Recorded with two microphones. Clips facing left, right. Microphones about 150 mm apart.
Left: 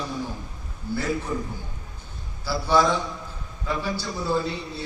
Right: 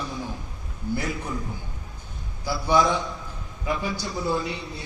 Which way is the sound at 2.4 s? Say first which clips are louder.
Even; 15° right (ahead or behind).